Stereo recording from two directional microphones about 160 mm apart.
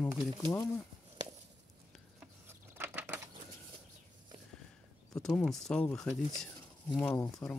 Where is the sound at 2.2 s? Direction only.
15° right (ahead or behind).